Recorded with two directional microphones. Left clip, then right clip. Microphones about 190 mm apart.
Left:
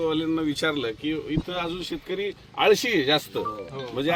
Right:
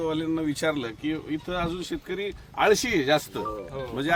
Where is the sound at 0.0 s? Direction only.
20° right (ahead or behind).